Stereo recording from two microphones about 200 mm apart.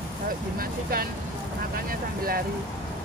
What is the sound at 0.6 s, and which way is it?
Speech, 45° right (ahead or behind).